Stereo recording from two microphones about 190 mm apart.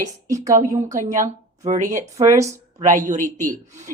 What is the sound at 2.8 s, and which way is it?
Speech, 40° right (ahead or behind).